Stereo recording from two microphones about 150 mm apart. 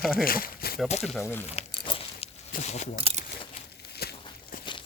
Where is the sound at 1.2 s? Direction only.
15° left (ahead or behind).